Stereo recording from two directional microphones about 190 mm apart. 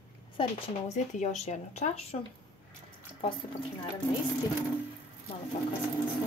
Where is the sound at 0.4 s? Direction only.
35° left (ahead or behind).